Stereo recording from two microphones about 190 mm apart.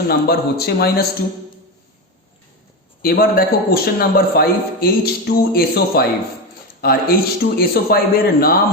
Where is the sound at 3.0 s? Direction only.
50° left (ahead or behind).